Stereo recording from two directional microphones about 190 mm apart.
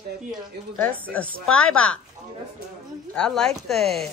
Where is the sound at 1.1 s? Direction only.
5° left (ahead or behind).